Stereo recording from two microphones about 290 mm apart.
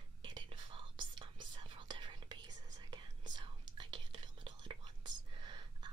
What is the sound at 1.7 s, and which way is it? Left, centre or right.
Whispering, centre.